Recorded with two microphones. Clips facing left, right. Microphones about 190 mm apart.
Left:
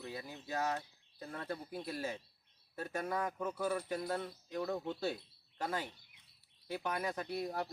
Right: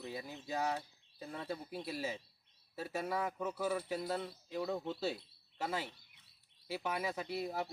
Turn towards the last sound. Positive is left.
turn(degrees=-5)  # may be behind; listen again after turning